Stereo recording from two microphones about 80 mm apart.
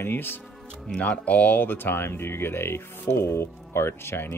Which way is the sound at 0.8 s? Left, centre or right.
Centre.